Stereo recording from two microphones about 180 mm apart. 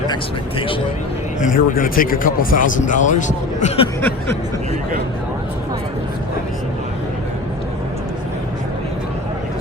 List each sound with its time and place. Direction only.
1.4 s speech: 50° left (ahead or behind)